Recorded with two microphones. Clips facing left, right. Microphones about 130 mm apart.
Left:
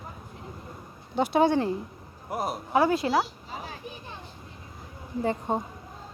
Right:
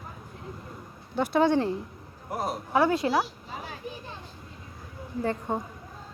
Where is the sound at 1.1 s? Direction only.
15° left (ahead or behind).